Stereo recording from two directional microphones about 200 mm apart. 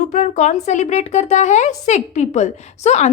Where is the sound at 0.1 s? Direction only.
35° left (ahead or behind).